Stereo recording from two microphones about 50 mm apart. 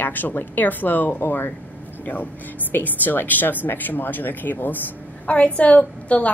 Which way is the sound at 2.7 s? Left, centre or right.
Left.